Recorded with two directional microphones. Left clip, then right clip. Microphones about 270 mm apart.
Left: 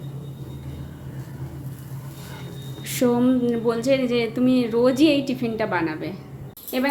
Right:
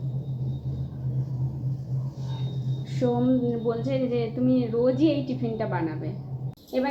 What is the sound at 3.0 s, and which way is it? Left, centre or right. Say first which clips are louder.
Speech: left 4 dB; left.